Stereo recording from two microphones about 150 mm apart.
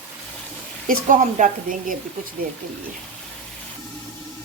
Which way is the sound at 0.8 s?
55° right (ahead or behind).